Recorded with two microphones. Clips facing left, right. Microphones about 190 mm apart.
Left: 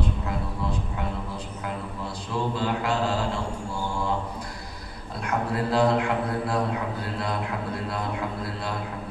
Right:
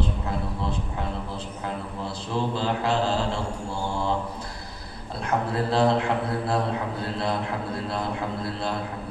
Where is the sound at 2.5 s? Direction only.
30° right (ahead or behind).